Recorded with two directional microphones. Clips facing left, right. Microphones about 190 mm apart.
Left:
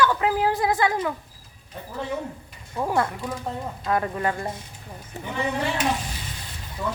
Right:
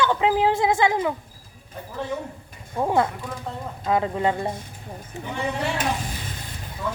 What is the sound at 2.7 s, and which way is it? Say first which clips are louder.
Speech: right 3 dB; 20° right (ahead or behind).